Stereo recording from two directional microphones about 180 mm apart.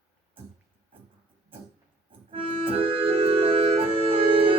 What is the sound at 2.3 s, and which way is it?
Music, 30° right (ahead or behind).